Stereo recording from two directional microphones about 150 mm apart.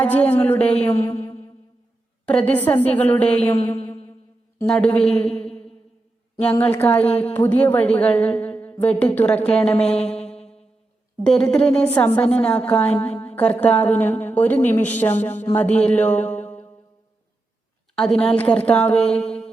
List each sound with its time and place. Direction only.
0.0 s a woman's voice: 10° left (ahead or behind)
2.2 s a woman's voice: 10° left (ahead or behind)
4.6 s a woman's voice: 5° left (ahead or behind)
10.0 s music: 5° left (ahead or behind)
11.2 s a woman's voice: 5° left (ahead or behind)
17.9 s a woman's voice: 5° left (ahead or behind)